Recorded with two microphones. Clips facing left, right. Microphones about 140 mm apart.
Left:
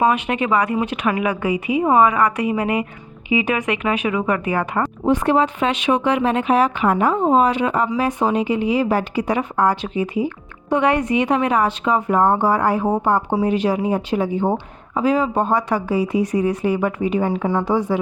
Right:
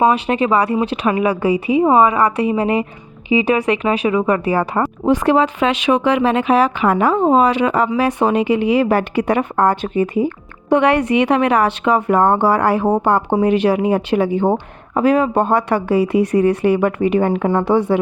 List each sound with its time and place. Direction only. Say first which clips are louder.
0.0 s speech: right 3 dB; 30° right (ahead or behind)
5.0 s speech: right 3 dB; 90° right; by 10.8 s 50° right (ahead or behind)
10.8 s speech: right 3 dB; 70° right (ahead or behind)
14.9 s speech: right 4 dB; 60° right (ahead or behind)